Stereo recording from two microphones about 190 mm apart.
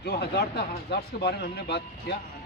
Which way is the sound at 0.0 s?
60° left (ahead or behind).